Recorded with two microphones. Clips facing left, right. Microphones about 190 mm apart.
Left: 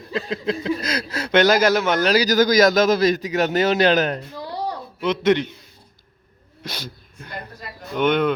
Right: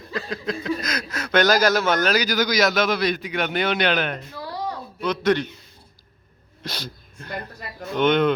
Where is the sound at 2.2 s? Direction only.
45° left (ahead or behind).